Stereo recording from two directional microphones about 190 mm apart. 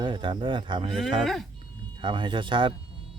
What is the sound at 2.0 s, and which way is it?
Speech, 25° right (ahead or behind).